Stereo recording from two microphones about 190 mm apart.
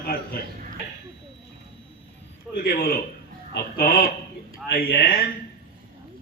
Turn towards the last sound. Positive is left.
turn(degrees=50)  # may be behind; listen again after turning